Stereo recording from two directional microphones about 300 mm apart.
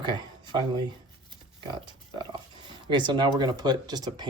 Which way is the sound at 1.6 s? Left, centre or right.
Centre.